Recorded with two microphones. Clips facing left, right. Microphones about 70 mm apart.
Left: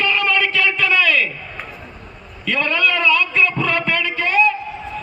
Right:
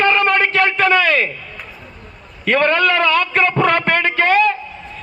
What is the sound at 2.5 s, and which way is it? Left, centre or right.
A man's voice, right.